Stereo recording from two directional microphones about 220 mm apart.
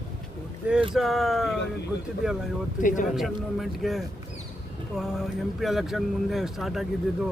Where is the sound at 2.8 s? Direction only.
35° left (ahead or behind).